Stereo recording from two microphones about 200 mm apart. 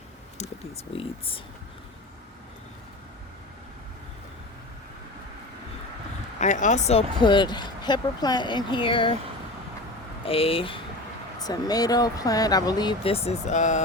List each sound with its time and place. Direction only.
6.4 s speech: 35° left (ahead or behind)
10.2 s speech: 30° left (ahead or behind)